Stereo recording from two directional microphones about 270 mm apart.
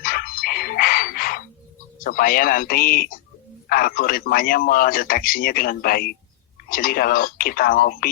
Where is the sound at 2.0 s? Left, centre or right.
Left.